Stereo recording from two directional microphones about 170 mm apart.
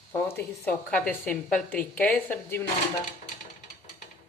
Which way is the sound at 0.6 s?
10° left (ahead or behind).